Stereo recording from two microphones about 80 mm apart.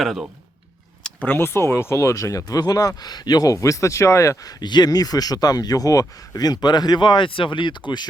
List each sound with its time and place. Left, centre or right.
0.0 s speech: centre
1.0 s a sound: centre
1.4 s speech: left
2.4 s speech: left
4.6 s speech: left